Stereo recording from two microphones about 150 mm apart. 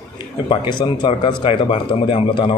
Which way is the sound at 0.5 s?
30° left (ahead or behind).